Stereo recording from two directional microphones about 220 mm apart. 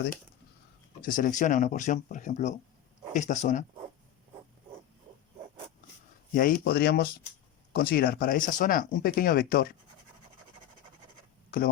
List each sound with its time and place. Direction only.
1.0 s speech: 40° left (ahead or behind)
6.3 s speech: 40° left (ahead or behind)
11.5 s speech: 40° left (ahead or behind)